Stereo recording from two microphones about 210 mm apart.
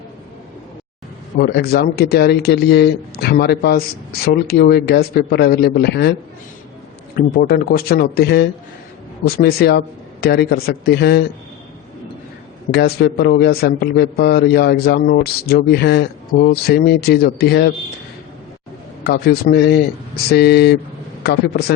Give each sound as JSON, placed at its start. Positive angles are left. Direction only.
{"t": 1.4, "sound": "a man's voice", "side_deg": 50}
{"t": 7.2, "sound": "a man's voice", "side_deg": 45}
{"t": 12.7, "sound": "a man's voice", "side_deg": 50}
{"t": 19.0, "sound": "a man's voice", "side_deg": 45}